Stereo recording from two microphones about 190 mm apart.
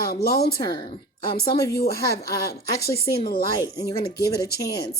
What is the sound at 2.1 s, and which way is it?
Speech, 55° left (ahead or behind).